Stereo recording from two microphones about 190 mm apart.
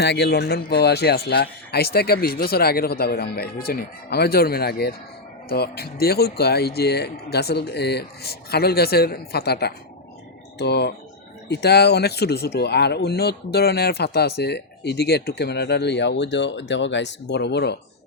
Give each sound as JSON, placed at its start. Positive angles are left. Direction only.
{"t": 0.0, "sound": "speech", "side_deg": 60}